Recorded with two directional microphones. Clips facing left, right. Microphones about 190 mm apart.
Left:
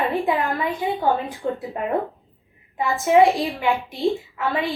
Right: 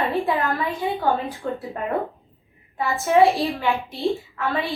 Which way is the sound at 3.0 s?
15° left (ahead or behind).